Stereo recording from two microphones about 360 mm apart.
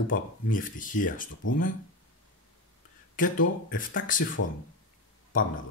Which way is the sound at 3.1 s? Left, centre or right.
Left.